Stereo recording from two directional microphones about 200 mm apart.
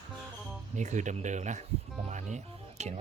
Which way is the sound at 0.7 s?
35° right (ahead or behind).